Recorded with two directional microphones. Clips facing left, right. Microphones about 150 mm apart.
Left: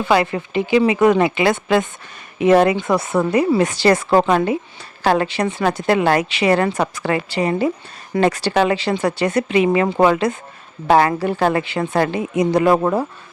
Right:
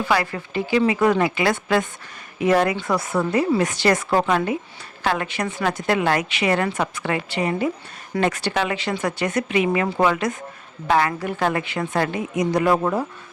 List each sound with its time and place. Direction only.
0.0 s a woman's voice: 25° left (ahead or behind); by 13.1 s 40° left (ahead or behind)